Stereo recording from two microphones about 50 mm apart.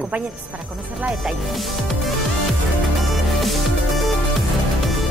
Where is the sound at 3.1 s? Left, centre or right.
Centre.